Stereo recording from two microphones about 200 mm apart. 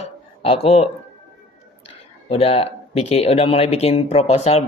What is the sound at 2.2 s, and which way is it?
Speech, 30° left (ahead or behind).